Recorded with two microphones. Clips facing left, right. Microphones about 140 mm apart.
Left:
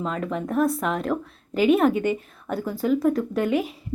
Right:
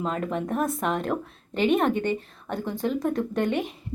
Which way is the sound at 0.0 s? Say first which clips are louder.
Even; centre (ahead or behind).